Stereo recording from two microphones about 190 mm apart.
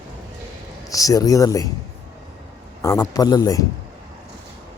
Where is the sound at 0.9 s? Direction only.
20° left (ahead or behind).